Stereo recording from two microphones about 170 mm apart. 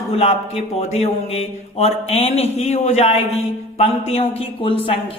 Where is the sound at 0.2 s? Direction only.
40° left (ahead or behind).